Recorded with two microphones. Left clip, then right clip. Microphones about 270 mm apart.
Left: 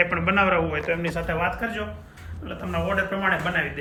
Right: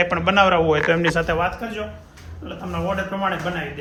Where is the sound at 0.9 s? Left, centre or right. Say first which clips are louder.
Right 7 dB; right.